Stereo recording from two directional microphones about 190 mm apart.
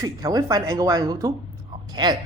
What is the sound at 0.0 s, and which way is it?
Speech, 20° right (ahead or behind).